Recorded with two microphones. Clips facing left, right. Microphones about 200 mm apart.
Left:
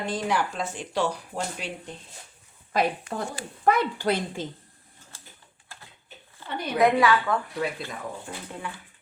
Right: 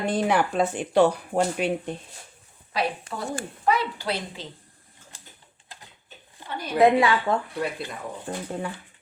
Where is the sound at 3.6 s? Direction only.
50° left (ahead or behind).